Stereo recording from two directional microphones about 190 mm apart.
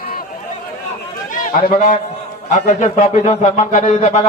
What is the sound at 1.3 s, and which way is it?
A man's voice, 45° left (ahead or behind).